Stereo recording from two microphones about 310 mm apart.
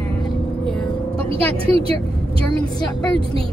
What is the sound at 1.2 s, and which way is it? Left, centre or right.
Speech, centre.